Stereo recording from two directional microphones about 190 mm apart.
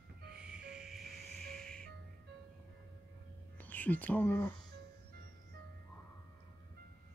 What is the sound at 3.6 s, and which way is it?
Speech, 10° left (ahead or behind).